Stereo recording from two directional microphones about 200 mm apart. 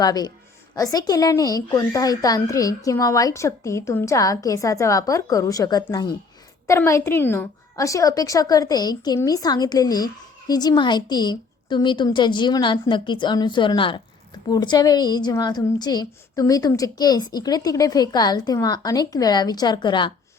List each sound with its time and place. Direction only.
0.0 s a woman's voice: 20° left (ahead or behind)